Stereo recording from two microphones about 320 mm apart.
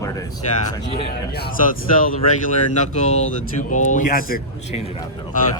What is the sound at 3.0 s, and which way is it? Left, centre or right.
A man's voice, left.